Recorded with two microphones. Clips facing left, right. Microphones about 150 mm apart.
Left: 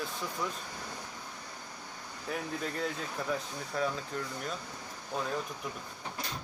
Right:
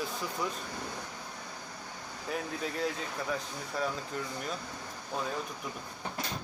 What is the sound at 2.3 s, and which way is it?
Speech, centre (ahead or behind).